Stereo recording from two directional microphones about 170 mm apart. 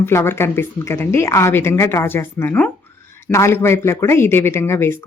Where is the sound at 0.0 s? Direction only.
15° left (ahead or behind).